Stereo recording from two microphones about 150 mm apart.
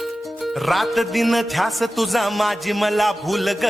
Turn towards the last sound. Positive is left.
turn(degrees=0)  # may be behind; listen again after turning